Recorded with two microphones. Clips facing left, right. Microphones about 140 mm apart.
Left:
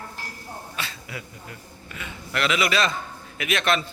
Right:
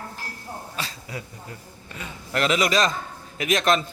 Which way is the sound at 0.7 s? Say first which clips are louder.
Right 1 dB; 35° right (ahead or behind).